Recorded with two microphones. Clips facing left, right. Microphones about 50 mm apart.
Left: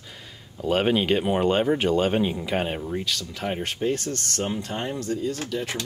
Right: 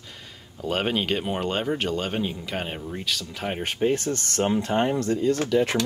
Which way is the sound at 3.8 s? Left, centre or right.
Right.